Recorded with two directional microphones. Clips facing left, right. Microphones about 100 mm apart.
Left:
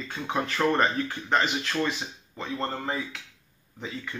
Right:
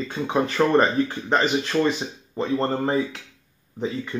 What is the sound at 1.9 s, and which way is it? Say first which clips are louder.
Speech: right 8 dB; 40° right (ahead or behind).